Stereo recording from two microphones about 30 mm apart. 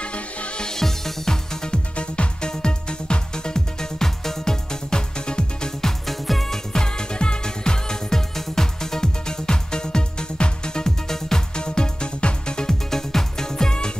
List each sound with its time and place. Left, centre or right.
0.0 s music: left
0.6 s music: centre
4.9 s music: left
6.0 s music: centre
6.8 s music: left
12.6 s music: centre